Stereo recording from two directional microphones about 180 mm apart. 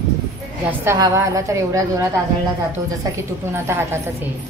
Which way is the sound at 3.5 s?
15° right (ahead or behind).